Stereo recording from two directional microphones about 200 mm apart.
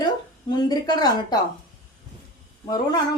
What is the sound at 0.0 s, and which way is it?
Speech, 20° left (ahead or behind).